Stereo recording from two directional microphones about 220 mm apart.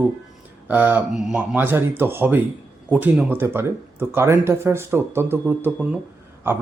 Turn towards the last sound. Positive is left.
turn(degrees=-10)  # may be behind; listen again after turning